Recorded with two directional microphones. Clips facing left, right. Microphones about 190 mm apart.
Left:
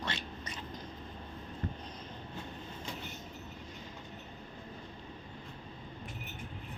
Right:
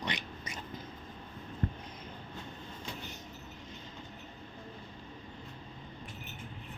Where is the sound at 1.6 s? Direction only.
50° right (ahead or behind).